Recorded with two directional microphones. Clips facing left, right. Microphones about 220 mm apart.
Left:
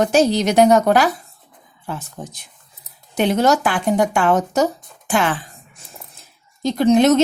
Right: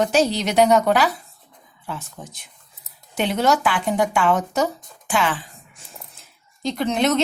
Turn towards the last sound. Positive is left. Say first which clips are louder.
# left 7 dB
turn(degrees=40)  # may be behind; listen again after turning